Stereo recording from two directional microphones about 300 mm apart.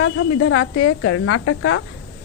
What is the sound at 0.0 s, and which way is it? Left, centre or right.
Speech, left.